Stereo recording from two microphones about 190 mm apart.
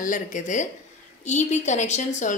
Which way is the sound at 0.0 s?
40° left (ahead or behind).